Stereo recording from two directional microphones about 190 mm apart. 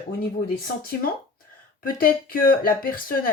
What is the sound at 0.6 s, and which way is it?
Speech, 50° left (ahead or behind).